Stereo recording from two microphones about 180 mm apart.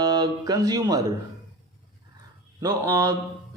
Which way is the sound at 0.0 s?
20° right (ahead or behind).